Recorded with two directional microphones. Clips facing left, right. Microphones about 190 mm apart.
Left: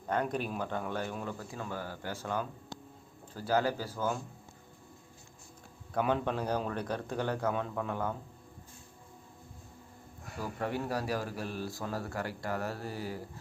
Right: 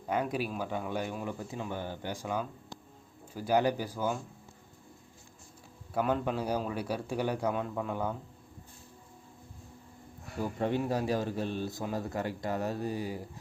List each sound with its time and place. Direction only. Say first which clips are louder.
0.1 s speech: right 1 dB; 5° right (ahead or behind)
5.9 s speech: right 1 dB; 5° right (ahead or behind)
10.4 s a man's voice: right 4 dB; 20° right (ahead or behind)